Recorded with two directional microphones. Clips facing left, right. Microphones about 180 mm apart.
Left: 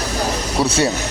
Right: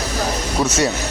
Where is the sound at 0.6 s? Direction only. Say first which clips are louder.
Left 1 dB; 35° left (ahead or behind).